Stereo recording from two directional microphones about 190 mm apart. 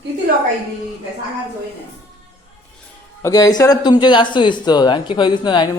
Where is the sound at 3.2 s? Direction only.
20° left (ahead or behind).